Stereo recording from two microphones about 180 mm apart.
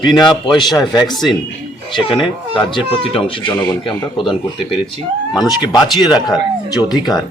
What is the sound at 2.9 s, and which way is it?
Speech, 30° left (ahead or behind).